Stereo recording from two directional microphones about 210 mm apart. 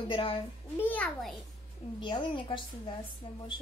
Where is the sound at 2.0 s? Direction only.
25° left (ahead or behind).